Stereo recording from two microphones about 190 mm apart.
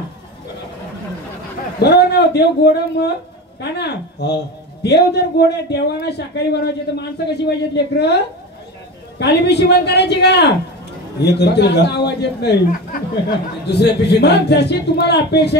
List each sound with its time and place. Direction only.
1.8 s a man's voice: 60° left (ahead or behind)
9.2 s a man's voice: 60° left (ahead or behind)